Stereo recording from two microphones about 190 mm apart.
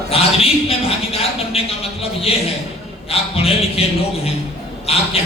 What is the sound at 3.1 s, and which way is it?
A man's voice, 30° left (ahead or behind).